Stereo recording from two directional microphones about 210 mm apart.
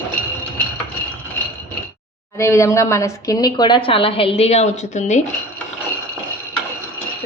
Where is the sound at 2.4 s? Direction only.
15° left (ahead or behind); by 5.2 s 35° left (ahead or behind).